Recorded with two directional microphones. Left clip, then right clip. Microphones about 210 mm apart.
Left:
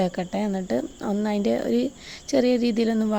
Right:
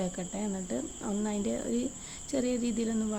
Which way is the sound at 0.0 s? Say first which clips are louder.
Left 10 dB; 35° left (ahead or behind).